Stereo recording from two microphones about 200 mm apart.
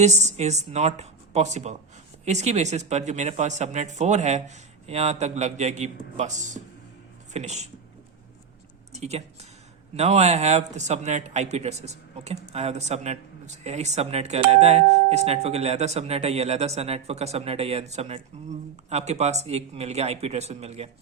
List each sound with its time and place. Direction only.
0.0 s a man's voice: 35° right (ahead or behind)
8.9 s a man's voice: 35° right (ahead or behind)